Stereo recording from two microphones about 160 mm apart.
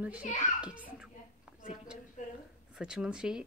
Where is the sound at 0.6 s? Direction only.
5° right (ahead or behind).